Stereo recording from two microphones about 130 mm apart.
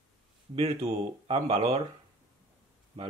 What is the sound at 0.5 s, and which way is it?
Speech, 50° right (ahead or behind).